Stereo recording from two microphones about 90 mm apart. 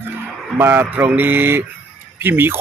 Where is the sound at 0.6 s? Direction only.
25° right (ahead or behind).